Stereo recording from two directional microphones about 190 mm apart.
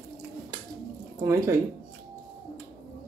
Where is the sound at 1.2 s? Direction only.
15° right (ahead or behind).